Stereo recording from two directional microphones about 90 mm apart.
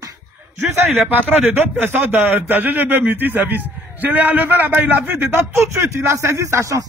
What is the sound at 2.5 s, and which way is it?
A man's voice, 20° right (ahead or behind).